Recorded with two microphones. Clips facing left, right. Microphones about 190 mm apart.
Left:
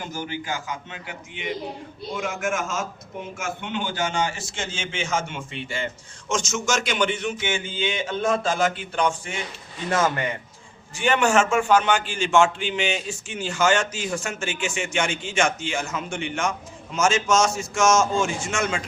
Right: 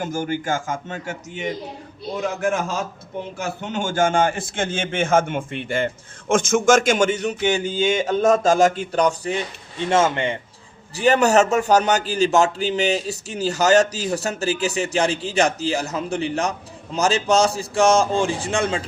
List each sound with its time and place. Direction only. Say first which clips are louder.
0.0 s a man's voice: right 7 dB; 50° right (ahead or behind)
9.9 s a man's voice: right 4 dB; 25° right (ahead or behind)
10.9 s a man's voice: right 4 dB; 40° right (ahead or behind)